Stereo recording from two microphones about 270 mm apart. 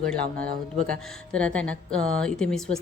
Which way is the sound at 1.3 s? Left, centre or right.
Centre.